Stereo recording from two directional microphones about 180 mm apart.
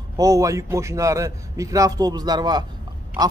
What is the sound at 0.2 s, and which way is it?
A man's voice, 20° right (ahead or behind).